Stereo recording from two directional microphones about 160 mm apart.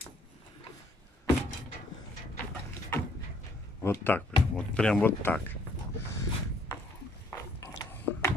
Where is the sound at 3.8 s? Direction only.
15° left (ahead or behind).